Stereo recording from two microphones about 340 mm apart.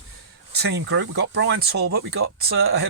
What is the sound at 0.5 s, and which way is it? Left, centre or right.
Speech, right.